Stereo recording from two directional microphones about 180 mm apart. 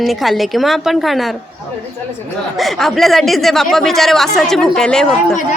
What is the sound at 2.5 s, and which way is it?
Speech, centre (ahead or behind).